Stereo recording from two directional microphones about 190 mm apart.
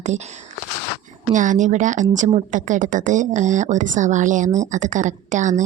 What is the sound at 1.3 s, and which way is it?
A woman's voice, 40° right (ahead or behind).